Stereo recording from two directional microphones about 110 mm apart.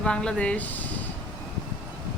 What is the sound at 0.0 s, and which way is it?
Speech, 10° left (ahead or behind).